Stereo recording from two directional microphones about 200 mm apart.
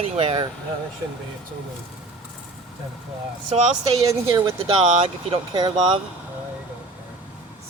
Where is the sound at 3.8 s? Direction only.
15° right (ahead or behind).